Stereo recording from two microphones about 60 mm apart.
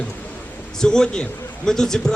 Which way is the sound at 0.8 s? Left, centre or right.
Centre.